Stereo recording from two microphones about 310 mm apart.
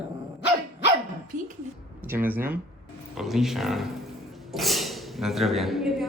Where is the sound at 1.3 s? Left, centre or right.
Right.